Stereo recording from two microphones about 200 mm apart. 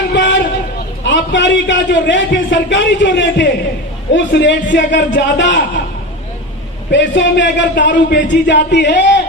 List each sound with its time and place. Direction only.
0.1 s a sound: 65° left (ahead or behind)
1.0 s a man's voice: 65° left (ahead or behind)
6.9 s a man's voice: 65° left (ahead or behind)